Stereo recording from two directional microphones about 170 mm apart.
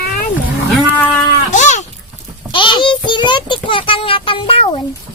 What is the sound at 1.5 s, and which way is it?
Babbling, 45° left (ahead or behind).